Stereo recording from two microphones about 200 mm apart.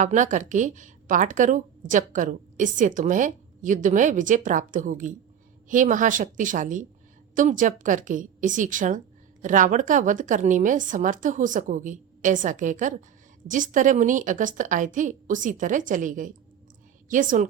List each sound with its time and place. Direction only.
0.0 s speech: 40° right (ahead or behind)